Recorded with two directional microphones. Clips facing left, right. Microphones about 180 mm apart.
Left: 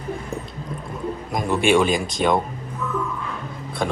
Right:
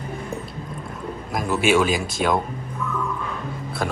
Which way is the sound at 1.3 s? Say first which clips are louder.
Left 1 dB; 5° right (ahead or behind).